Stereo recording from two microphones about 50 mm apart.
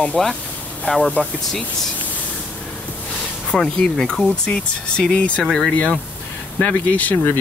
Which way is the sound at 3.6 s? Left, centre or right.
Centre.